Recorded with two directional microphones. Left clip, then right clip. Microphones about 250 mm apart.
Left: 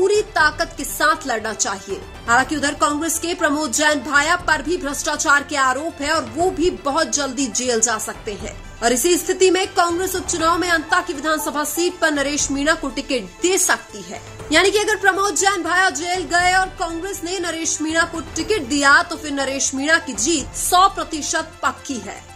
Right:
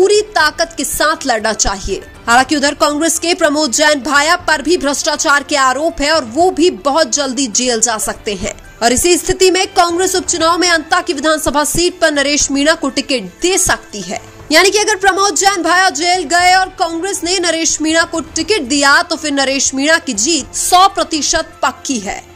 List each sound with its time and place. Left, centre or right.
0.0 s a woman's voice: right